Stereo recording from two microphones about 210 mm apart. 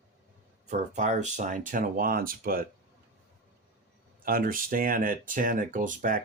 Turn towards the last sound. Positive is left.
turn(degrees=-40)  # may be behind; listen again after turning